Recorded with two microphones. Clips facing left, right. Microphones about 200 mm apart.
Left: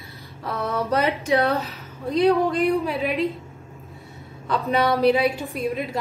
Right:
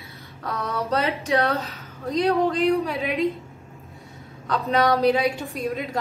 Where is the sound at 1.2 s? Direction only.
15° left (ahead or behind).